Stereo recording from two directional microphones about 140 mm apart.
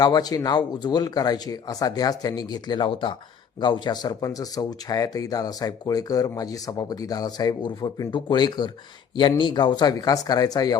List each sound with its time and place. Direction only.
0.0 s speech: 30° left (ahead or behind)